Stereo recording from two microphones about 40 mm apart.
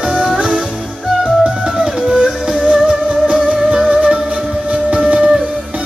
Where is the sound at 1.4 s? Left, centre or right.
Centre.